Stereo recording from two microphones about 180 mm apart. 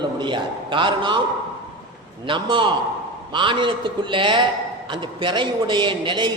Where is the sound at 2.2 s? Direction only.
30° right (ahead or behind).